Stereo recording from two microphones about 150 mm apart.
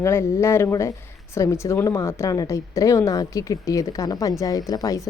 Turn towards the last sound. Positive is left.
turn(degrees=20)  # may be behind; listen again after turning